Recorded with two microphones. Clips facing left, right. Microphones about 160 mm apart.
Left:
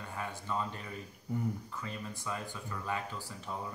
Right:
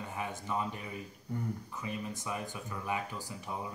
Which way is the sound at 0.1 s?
15° right (ahead or behind).